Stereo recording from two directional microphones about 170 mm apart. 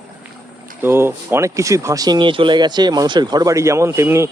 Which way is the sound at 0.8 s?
15° right (ahead or behind).